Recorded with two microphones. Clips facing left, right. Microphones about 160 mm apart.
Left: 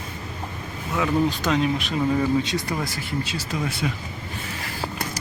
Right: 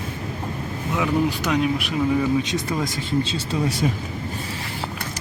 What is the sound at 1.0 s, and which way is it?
Speech, 15° right (ahead or behind).